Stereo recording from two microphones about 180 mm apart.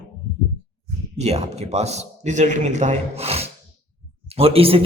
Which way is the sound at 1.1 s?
35° right (ahead or behind).